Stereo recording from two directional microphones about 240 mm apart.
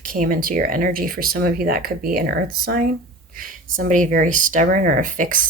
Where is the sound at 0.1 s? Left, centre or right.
Right.